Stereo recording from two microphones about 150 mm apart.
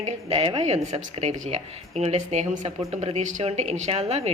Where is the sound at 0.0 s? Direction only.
45° right (ahead or behind).